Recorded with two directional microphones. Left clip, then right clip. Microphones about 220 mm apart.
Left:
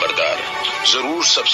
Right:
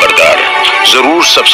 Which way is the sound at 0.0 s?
35° right (ahead or behind).